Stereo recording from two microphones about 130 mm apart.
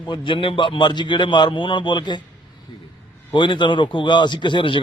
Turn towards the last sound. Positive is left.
turn(degrees=40)  # may be behind; listen again after turning